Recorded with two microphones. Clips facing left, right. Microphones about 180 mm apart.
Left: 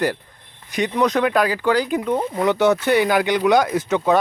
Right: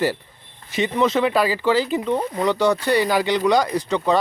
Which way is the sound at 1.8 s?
10° left (ahead or behind).